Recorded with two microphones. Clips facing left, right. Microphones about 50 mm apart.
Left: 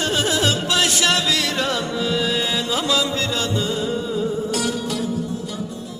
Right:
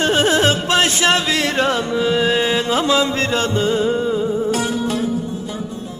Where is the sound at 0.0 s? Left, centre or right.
Right.